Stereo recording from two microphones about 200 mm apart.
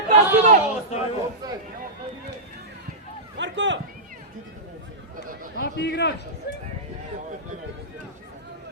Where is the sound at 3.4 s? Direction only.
65° right (ahead or behind).